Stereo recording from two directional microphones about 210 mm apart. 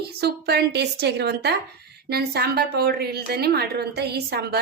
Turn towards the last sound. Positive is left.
turn(degrees=-50)  # may be behind; listen again after turning